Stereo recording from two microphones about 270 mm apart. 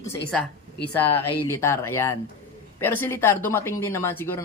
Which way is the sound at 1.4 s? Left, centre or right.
Centre.